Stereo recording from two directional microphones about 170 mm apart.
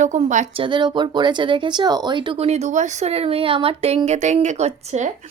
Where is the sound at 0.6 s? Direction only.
25° right (ahead or behind); by 5.1 s 45° right (ahead or behind).